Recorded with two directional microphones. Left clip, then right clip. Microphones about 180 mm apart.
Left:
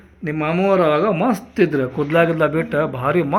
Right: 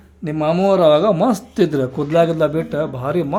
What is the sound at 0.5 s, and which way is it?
Speech, 25° right (ahead or behind).